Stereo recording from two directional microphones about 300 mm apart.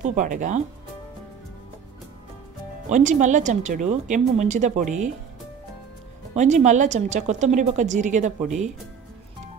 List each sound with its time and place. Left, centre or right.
0.0 s a woman's voice: right
2.9 s a woman's voice: right
6.3 s a woman's voice: right